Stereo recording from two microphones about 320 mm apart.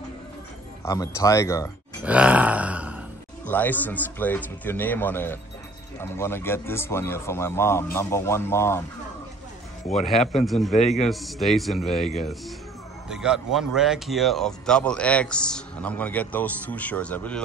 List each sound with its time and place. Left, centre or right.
0.8 s a man's voice: centre
2.0 s a man's voice: centre
9.9 s speech: centre
10.7 s a man's voice: left
11.1 s speech: centre
13.1 s speech: centre